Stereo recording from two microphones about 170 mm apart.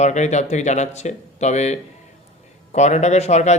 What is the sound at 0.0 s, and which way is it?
Speech, 45° left (ahead or behind).